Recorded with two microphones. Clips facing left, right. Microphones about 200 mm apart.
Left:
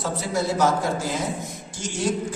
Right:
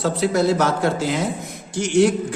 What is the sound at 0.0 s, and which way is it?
A man's voice, 70° right (ahead or behind).